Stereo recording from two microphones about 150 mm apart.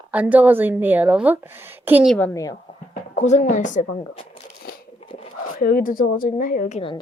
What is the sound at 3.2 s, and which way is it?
Speech, 50° left (ahead or behind).